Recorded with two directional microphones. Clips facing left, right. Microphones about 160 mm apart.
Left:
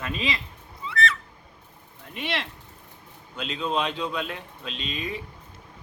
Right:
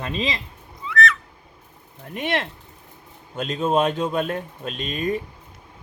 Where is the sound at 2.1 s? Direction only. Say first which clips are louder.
Right 6 dB; 50° right (ahead or behind).